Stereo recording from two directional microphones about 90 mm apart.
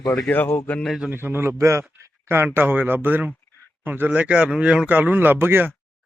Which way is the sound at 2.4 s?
20° right (ahead or behind).